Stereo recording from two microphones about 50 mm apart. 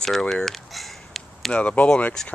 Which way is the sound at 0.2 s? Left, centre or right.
Centre.